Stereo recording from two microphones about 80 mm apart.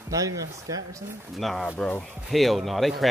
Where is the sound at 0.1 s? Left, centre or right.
Right.